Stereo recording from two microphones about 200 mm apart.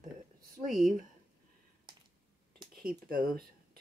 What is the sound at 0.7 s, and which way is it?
Speech, centre (ahead or behind).